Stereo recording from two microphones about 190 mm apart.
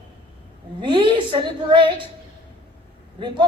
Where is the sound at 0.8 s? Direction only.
25° right (ahead or behind).